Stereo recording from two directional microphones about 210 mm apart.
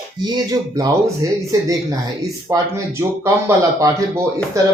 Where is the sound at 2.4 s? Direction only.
15° right (ahead or behind).